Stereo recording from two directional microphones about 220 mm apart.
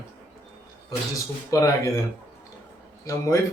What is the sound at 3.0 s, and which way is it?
Speech, 15° left (ahead or behind).